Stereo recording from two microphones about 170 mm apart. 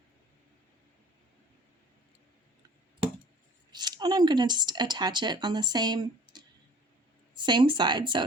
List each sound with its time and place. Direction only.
3.7 s speech: 25° right (ahead or behind)